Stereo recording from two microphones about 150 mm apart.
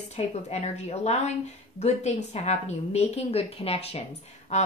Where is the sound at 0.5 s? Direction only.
45° left (ahead or behind).